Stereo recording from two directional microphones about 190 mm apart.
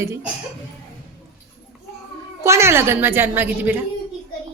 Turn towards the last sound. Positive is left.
turn(degrees=-10)  # may be behind; listen again after turning